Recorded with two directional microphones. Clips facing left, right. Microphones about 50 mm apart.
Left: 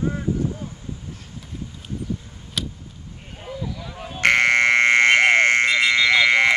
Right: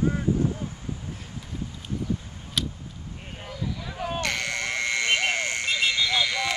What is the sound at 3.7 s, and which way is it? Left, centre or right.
Sheep, centre.